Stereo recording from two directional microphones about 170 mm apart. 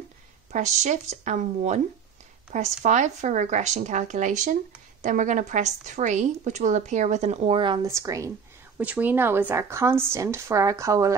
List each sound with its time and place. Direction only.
0.5 s a woman's voice: 45° right (ahead or behind); by 11.1 s 20° right (ahead or behind)